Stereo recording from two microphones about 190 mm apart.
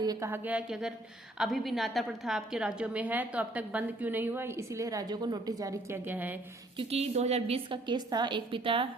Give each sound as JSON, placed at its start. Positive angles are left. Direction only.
{"t": 0.0, "sound": "a woman's voice", "side_deg": -15}
{"t": 6.7, "sound": "a woman's voice", "side_deg": -30}